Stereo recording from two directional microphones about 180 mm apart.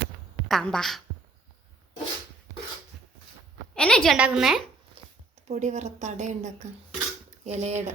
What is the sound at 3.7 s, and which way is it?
Speech, 5° left (ahead or behind).